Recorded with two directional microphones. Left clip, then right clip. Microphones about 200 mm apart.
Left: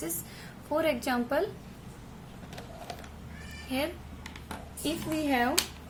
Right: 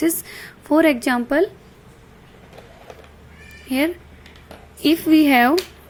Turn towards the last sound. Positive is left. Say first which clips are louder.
# right 14 dB
turn(degrees=-50)  # may be behind; listen again after turning